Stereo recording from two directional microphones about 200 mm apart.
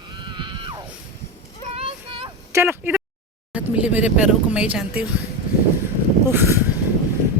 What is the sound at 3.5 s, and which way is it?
Speech, 5° right (ahead or behind).